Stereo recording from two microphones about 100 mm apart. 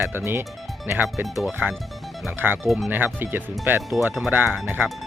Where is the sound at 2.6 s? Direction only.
Centre (ahead or behind).